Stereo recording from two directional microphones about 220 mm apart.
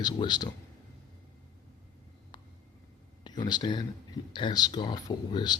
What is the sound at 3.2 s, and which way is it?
Speech, 20° left (ahead or behind).